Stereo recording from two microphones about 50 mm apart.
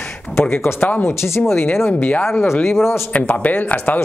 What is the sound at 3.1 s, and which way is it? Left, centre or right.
Speech, left.